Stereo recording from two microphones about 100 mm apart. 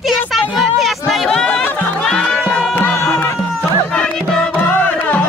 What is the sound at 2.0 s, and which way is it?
Music, 10° left (ahead or behind).